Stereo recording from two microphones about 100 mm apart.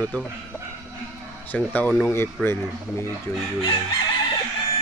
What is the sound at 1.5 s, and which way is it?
Speech, 15° left (ahead or behind).